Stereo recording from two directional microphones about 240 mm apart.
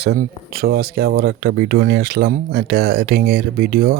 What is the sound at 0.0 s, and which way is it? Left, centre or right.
A man's voice, right.